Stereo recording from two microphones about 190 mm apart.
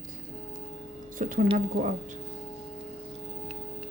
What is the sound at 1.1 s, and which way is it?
Speech, 45° right (ahead or behind).